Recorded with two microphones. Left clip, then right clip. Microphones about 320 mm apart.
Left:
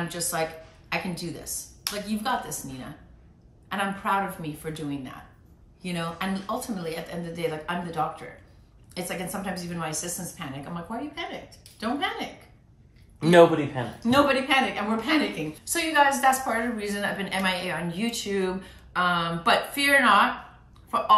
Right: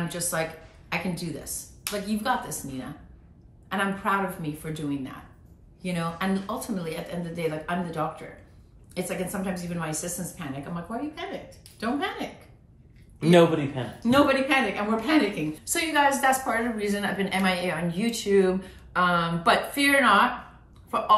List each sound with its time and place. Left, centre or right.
0.1 s a woman's voice: centre
3.6 s a woman's voice: centre
13.2 s a man's voice: left
14.0 s a woman's voice: centre